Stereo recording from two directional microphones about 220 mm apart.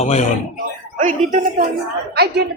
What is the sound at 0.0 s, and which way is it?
Speech, 30° left (ahead or behind).